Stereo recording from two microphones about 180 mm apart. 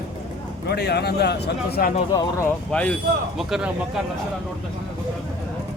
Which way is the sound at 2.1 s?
20° left (ahead or behind).